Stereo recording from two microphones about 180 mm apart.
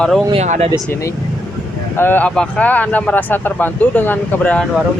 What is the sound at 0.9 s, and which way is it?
Speech, 15° left (ahead or behind).